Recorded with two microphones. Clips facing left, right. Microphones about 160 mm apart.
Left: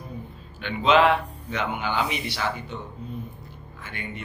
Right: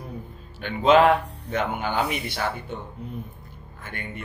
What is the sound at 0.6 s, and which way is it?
Speech, 45° right (ahead or behind).